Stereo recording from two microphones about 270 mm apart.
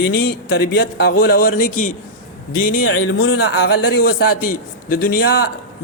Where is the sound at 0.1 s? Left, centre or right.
Left.